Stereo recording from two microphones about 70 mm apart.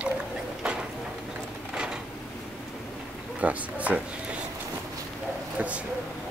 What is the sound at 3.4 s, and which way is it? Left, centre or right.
Speech, right.